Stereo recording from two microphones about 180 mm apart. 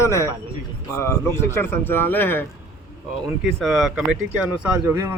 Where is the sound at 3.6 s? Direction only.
Centre (ahead or behind).